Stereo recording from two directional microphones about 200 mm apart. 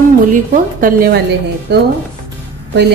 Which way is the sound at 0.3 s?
45° right (ahead or behind).